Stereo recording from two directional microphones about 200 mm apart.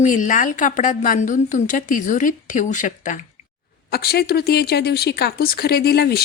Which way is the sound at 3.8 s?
50° left (ahead or behind).